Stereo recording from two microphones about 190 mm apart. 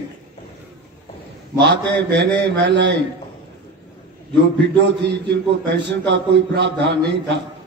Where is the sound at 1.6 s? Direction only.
65° right (ahead or behind).